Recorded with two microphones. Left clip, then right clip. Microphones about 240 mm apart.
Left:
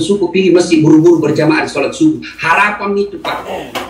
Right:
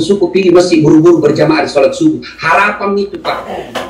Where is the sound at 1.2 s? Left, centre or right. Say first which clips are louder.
Right 3 dB; left.